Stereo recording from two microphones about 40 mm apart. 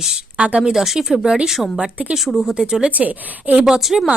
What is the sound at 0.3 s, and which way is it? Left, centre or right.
Speech, right.